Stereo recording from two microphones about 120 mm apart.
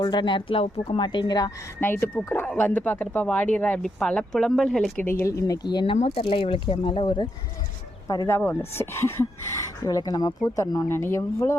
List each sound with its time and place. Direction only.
0.0 s speech: 40° left (ahead or behind)
1.8 s speech: 15° left (ahead or behind)
5.0 s speech: 25° left (ahead or behind)
6.2 s speech: 50° left (ahead or behind)
8.0 s speech: 30° left (ahead or behind)
8.4 s speech: 15° left (ahead or behind)